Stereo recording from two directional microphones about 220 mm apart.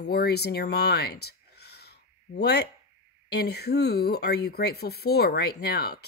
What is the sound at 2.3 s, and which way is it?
Speech, 50° left (ahead or behind).